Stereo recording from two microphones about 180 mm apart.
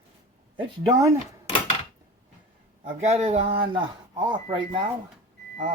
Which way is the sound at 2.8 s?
35° right (ahead or behind).